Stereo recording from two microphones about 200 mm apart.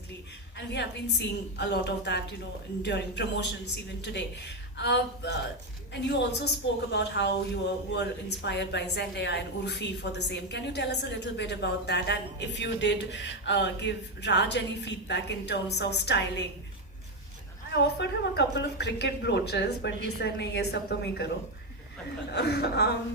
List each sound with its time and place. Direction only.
0.5 s speech: 60° left (ahead or behind)
17.7 s speech: 60° left (ahead or behind)
22.4 s speech: 55° left (ahead or behind)